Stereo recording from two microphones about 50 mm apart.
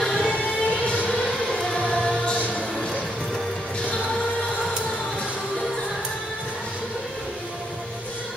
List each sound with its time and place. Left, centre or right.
0.0 s music: centre
0.7 s music: left
1.9 s choir: centre
2.7 s music: centre